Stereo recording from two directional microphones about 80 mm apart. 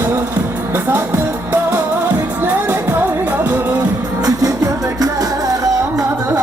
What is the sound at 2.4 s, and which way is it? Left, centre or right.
Music, right.